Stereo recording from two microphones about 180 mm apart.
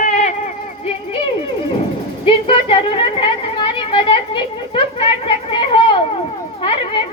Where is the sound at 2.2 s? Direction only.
30° left (ahead or behind).